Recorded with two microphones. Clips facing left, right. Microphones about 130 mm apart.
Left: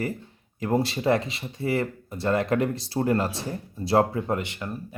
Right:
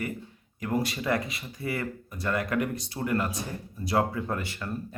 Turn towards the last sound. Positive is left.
turn(degrees=20)  # may be behind; listen again after turning